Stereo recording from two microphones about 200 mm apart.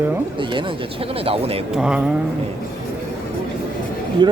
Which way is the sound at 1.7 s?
5° right (ahead or behind).